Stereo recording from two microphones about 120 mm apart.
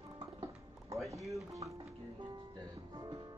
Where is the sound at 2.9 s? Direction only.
35° right (ahead or behind).